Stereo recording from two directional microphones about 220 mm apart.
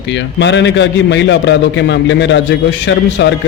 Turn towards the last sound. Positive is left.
turn(degrees=55)  # may be behind; listen again after turning